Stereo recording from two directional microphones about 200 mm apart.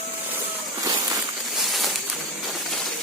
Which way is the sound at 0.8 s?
20° right (ahead or behind).